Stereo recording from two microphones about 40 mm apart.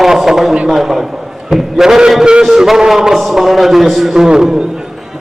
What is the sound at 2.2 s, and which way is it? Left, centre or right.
Music, right.